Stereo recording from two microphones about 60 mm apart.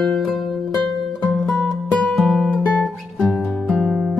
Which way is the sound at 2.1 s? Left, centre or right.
Centre.